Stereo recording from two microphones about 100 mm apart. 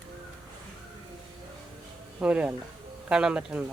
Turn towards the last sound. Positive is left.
turn(degrees=-10)  # may be behind; listen again after turning